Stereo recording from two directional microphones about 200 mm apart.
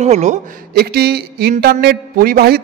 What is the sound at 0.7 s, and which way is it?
Speech, 50° right (ahead or behind).